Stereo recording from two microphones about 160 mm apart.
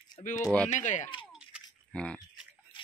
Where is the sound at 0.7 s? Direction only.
50° left (ahead or behind).